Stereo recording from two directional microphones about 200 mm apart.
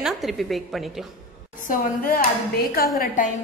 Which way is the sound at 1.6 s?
45° left (ahead or behind).